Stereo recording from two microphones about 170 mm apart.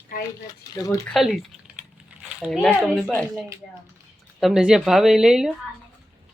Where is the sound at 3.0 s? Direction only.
10° left (ahead or behind).